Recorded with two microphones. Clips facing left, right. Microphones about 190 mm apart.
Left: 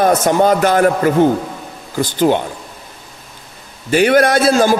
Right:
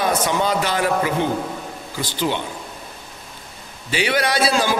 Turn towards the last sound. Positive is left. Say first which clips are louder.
# left 7 dB
turn(degrees=50)  # may be behind; listen again after turning